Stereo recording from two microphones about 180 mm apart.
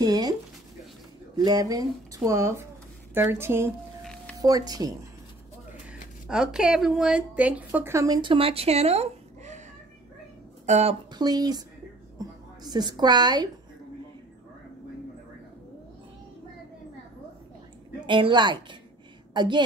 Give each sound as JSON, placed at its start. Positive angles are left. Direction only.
{"t": 0.0, "sound": "a sound", "side_deg": -20}
{"t": 1.4, "sound": "a woman's voice", "side_deg": -20}
{"t": 4.0, "sound": "a sound", "side_deg": 5}
{"t": 4.4, "sound": "a woman's voice", "side_deg": -20}
{"t": 6.2, "sound": "a woman's voice", "side_deg": -5}
{"t": 10.6, "sound": "speech", "side_deg": -40}
{"t": 11.1, "sound": "a woman's voice", "side_deg": -25}
{"t": 18.0, "sound": "a woman's voice", "side_deg": -25}